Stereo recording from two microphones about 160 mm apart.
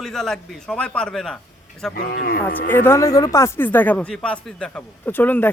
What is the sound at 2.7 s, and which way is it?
Speech, 15° left (ahead or behind).